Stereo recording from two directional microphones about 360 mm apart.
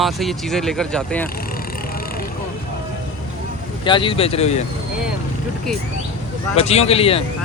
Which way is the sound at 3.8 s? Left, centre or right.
Centre.